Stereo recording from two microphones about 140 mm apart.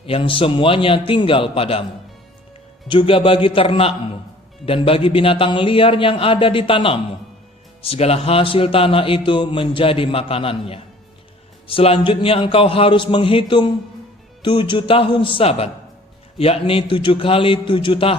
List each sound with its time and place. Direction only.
0.0 s speech: 40° left (ahead or behind)
2.8 s speech: 35° left (ahead or behind)